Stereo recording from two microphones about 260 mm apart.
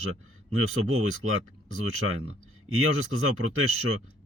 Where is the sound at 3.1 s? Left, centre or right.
Right.